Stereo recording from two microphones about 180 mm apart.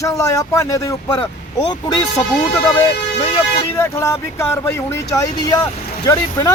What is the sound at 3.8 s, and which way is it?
Speech, 15° left (ahead or behind).